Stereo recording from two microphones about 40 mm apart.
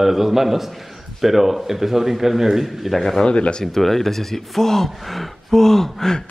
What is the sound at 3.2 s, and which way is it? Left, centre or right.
Speech, left.